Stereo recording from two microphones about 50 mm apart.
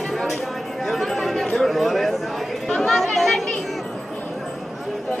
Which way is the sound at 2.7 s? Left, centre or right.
Centre.